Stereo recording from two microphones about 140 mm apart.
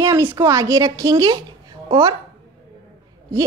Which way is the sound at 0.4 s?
20° right (ahead or behind).